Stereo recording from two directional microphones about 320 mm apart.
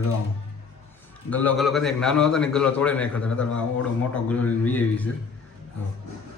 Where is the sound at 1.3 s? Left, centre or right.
Centre.